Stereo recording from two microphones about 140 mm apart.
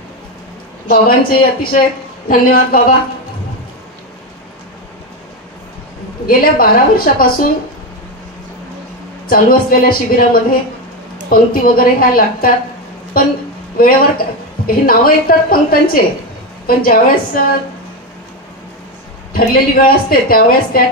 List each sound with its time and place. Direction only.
1.0 s a woman's voice: 90° left
6.2 s a woman's voice: 90° left
9.3 s a woman's voice: 90° left
19.3 s a woman's voice: 90° left